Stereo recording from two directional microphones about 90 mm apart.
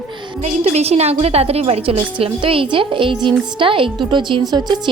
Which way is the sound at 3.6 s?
75° right (ahead or behind).